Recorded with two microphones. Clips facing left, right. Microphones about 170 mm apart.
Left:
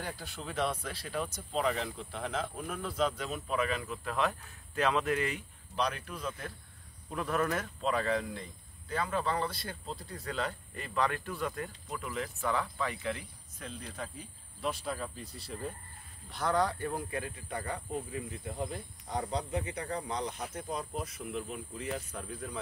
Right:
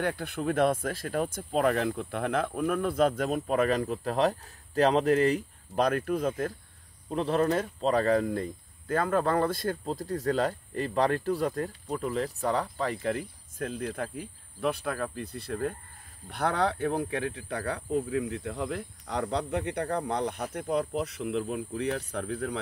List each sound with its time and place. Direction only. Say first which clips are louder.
0.0 s speech: right 11 dB; 60° right (ahead or behind)
7.1 s speech: right 6 dB; 30° right (ahead or behind)
13.6 s speech: right 9 dB; 55° right (ahead or behind); by 22.6 s 70° right (ahead or behind)